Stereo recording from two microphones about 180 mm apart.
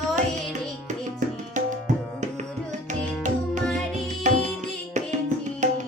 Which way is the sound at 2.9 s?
45° right (ahead or behind).